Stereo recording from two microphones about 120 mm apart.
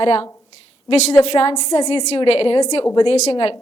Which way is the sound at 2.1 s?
50° left (ahead or behind).